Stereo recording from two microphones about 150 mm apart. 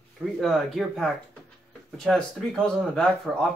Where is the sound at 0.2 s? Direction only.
Centre (ahead or behind).